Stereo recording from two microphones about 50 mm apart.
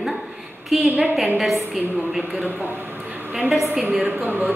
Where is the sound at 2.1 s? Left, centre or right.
Right.